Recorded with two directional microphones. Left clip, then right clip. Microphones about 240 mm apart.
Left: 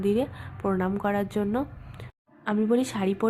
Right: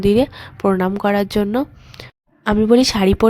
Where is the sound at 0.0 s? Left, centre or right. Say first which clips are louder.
Right 11 dB; right.